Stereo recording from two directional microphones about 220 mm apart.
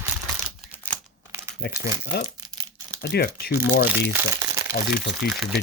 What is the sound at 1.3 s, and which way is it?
Crumpling, 10° right (ahead or behind).